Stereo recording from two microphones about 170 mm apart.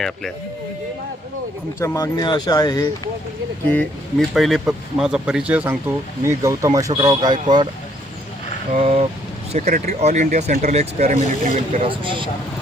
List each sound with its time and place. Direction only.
1.8 s speech: 20° left (ahead or behind)
3.7 s speech: 5° left (ahead or behind); by 7.3 s 25° right (ahead or behind)
8.7 s speech: 35° right (ahead or behind)
11.9 s speech: 30° right (ahead or behind)